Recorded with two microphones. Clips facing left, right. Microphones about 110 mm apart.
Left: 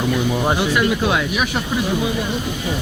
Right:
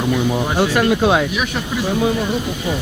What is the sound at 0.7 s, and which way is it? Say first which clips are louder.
Speech: right 2 dB; 40° right (ahead or behind).